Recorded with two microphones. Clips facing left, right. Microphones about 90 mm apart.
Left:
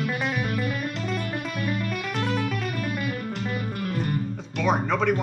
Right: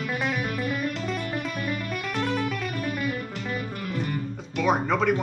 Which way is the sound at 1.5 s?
45° left (ahead or behind).